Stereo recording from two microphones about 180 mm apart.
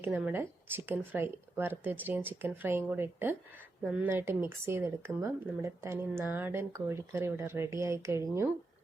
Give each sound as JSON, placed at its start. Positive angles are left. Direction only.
{"t": 0.2, "sound": "speech", "side_deg": -10}